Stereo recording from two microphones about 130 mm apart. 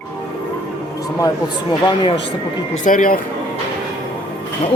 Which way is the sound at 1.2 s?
35° left (ahead or behind).